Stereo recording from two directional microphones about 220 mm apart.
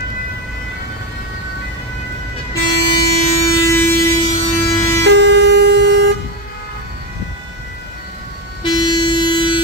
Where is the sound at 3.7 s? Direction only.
10° left (ahead or behind).